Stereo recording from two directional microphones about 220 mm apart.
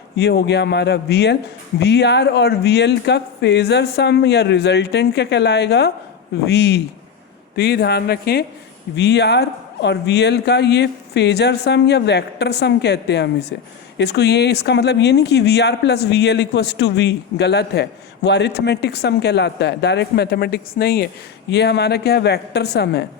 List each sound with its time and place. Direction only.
0.2 s speech: 50° left (ahead or behind)